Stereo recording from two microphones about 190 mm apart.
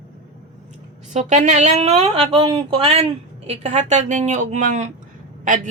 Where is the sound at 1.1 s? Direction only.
40° right (ahead or behind).